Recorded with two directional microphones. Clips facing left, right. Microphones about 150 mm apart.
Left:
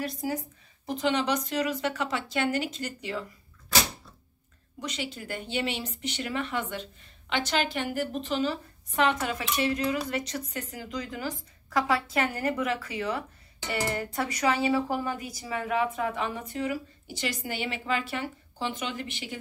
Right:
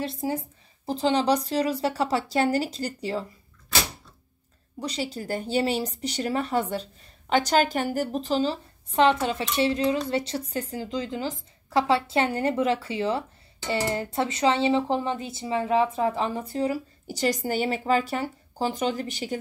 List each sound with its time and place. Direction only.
0.0 s speech: 30° right (ahead or behind)
4.7 s speech: 35° right (ahead or behind)